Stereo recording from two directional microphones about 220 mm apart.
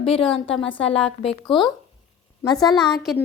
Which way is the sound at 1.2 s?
25° left (ahead or behind).